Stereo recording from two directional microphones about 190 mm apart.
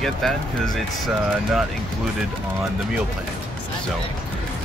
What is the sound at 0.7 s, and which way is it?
Speech, centre (ahead or behind).